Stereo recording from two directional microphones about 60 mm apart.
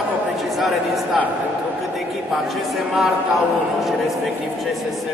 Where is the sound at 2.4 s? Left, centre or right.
Centre.